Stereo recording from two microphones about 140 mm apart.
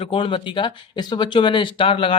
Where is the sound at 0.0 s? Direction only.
40° left (ahead or behind).